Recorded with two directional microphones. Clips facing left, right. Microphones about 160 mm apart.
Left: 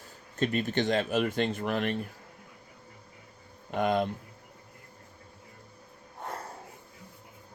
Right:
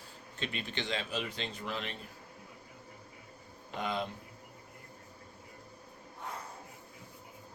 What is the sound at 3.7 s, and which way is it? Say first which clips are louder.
Speech: left 9 dB; 55° left (ahead or behind).